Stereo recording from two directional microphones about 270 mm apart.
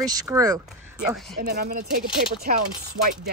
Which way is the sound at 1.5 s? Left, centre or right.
Right.